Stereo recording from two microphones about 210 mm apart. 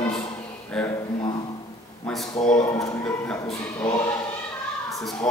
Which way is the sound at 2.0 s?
Centre (ahead or behind).